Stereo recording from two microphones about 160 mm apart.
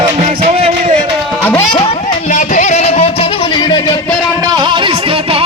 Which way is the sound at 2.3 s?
55° left (ahead or behind).